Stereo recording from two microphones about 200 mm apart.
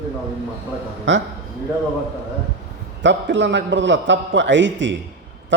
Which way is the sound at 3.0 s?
65° right (ahead or behind).